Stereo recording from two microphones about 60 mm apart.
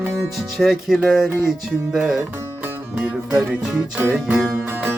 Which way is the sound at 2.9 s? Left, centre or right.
Right.